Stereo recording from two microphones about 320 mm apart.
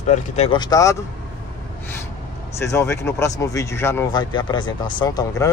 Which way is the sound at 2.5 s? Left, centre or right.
Centre.